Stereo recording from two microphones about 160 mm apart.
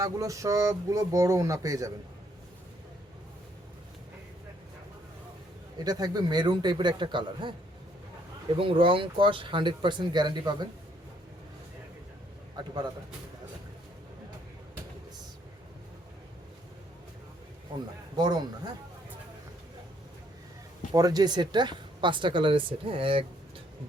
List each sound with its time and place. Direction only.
0.0 s speech: 20° right (ahead or behind)
5.8 s speech: 25° right (ahead or behind)
8.5 s speech: 35° right (ahead or behind)
18.2 s speech: 25° right (ahead or behind)
20.9 s speech: 25° right (ahead or behind)